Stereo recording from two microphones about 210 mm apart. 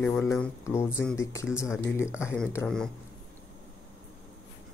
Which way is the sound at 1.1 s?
15° left (ahead or behind).